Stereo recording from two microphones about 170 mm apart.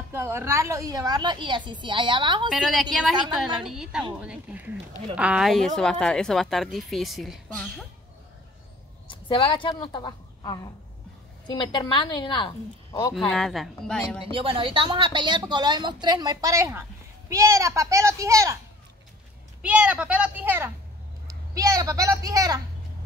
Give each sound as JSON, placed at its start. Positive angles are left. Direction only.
{"t": 0.1, "sound": "a woman's voice", "side_deg": -15}
{"t": 2.5, "sound": "a woman's voice", "side_deg": 0}
{"t": 9.0, "sound": "a woman's voice", "side_deg": 30}
{"t": 13.3, "sound": "a woman's voice", "side_deg": 0}
{"t": 14.2, "sound": "a woman's voice", "side_deg": -30}
{"t": 19.6, "sound": "a child's voice", "side_deg": -5}